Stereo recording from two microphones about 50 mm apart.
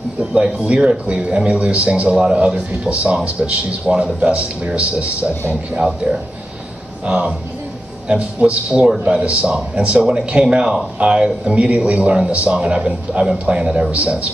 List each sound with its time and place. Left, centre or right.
0.2 s a man's voice: right